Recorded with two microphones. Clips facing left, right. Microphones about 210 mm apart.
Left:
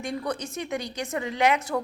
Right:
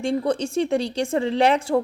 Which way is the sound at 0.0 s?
30° right (ahead or behind).